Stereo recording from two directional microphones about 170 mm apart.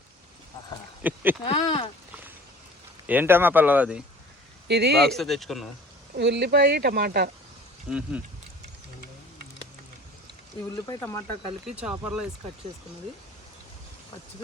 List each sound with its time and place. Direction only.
1.0 s speech: 10° right (ahead or behind)
1.5 s speech: 30° left (ahead or behind)
3.1 s speech: 10° right (ahead or behind)
4.7 s speech: 75° right (ahead or behind)
5.1 s speech: centre (ahead or behind)
6.1 s speech: 80° right
7.9 s speech: 5° right (ahead or behind)
10.8 s speech: 15° left (ahead or behind)
11.6 s speech: 5° right (ahead or behind)